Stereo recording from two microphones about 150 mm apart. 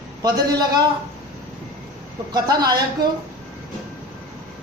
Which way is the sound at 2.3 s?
25° right (ahead or behind).